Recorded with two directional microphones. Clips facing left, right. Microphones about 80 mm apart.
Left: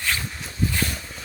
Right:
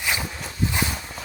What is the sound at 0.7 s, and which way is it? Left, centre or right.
Walk, centre.